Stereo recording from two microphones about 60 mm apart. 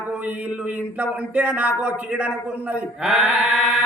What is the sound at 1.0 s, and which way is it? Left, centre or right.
Speech, right.